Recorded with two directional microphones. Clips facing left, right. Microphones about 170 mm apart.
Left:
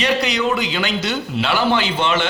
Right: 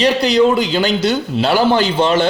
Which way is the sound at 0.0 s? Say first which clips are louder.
Right 7 dB; 35° right (ahead or behind).